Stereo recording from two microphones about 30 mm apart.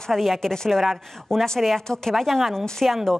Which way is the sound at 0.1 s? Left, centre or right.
Centre.